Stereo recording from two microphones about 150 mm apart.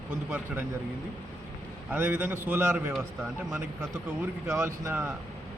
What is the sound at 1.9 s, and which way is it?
Speech, 10° right (ahead or behind).